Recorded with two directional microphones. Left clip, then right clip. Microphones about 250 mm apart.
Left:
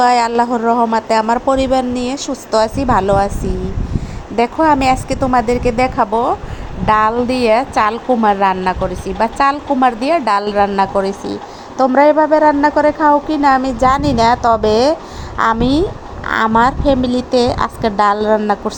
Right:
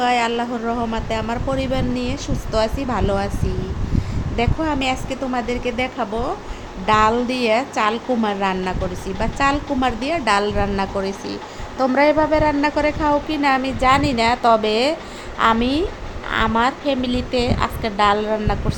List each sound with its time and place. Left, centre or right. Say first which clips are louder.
0.0 s a woman's voice: left 7 dB; centre
4.4 s a woman's voice: left 9 dB; centre